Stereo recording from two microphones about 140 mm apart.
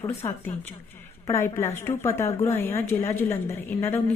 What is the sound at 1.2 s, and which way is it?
A woman's voice, 20° left (ahead or behind).